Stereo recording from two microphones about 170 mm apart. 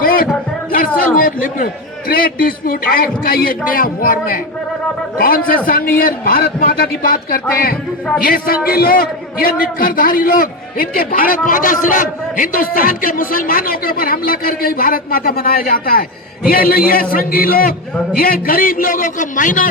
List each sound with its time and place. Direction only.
0.7 s a man's voice: 55° left (ahead or behind)